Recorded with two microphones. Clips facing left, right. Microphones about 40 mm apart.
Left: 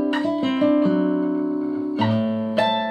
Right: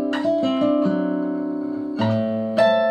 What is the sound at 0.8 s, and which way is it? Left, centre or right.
Music, centre.